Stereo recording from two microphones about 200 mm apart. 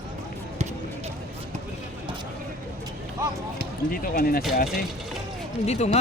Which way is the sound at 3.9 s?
45° left (ahead or behind).